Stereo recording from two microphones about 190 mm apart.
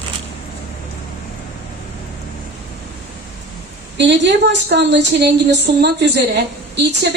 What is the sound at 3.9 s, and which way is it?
A woman's voice, 65° right (ahead or behind).